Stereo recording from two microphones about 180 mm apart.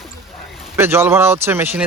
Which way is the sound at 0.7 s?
15° right (ahead or behind).